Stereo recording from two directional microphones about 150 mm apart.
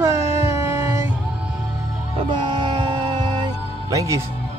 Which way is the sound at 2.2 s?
30° right (ahead or behind).